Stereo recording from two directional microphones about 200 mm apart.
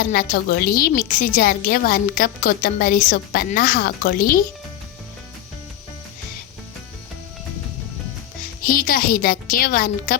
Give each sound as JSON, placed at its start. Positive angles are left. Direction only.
{"t": 0.0, "sound": "a woman's voice", "side_deg": 45}
{"t": 8.6, "sound": "a woman's voice", "side_deg": 45}